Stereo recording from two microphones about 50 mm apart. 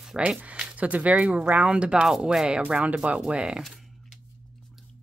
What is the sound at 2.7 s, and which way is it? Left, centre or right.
Speech, right.